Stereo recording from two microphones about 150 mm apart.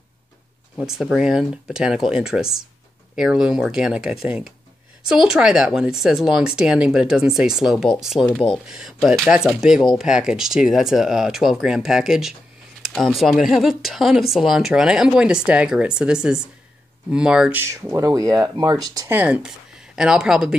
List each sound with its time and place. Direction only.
0.7 s speech: 5° right (ahead or behind); by 19.1 s 25° right (ahead or behind)
19.1 s speech: 10° right (ahead or behind)